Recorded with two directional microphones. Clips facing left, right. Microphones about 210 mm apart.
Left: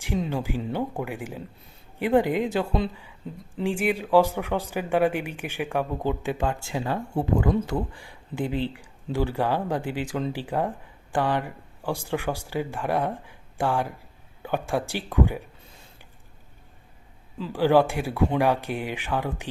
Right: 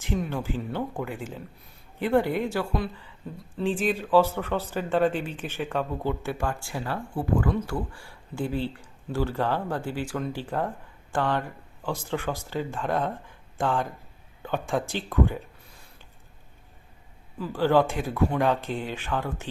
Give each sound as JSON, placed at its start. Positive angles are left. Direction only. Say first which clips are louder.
{"t": 0.2, "sound": "speech", "louder": "left 2 dB", "side_deg": 15}
{"t": 17.5, "sound": "speech", "louder": "left 2 dB", "side_deg": 10}